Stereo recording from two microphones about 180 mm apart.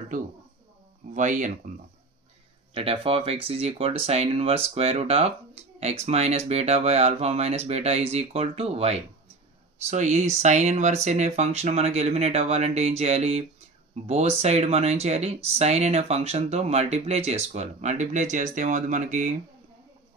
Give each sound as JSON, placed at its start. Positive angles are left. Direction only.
{"t": 1.1, "sound": "speech", "side_deg": -45}
{"t": 2.7, "sound": "speech", "side_deg": -30}